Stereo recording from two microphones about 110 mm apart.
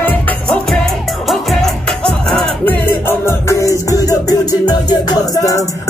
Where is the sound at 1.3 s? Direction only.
Centre (ahead or behind).